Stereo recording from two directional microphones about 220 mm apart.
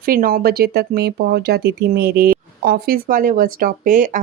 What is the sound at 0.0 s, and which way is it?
Speech, 40° right (ahead or behind).